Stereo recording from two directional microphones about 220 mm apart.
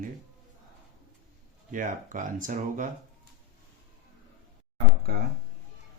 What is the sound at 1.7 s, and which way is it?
Speech, 35° right (ahead or behind).